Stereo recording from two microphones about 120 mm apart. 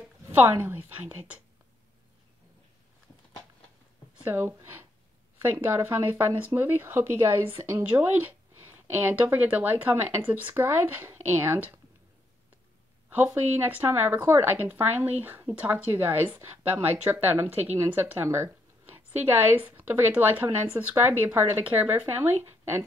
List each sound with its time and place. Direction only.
0.0 s a woman's voice: 20° right (ahead or behind)
4.2 s a woman's voice: 15° right (ahead or behind)
13.1 s a woman's voice: 15° right (ahead or behind)